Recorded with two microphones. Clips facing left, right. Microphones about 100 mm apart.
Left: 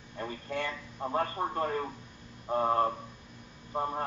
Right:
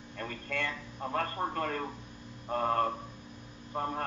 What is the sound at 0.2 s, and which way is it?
A man's voice, 20° left (ahead or behind).